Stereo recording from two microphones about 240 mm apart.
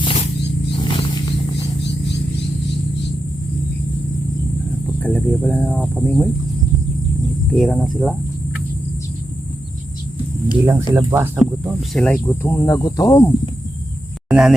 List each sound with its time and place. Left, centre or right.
0.0 s wild animals: left
0.9 s a sound: centre
5.0 s speech: centre
7.5 s speech: centre
10.7 s speech: centre
14.3 s speech: centre